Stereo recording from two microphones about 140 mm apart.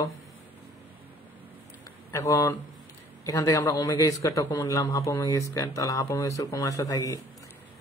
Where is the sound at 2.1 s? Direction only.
20° left (ahead or behind).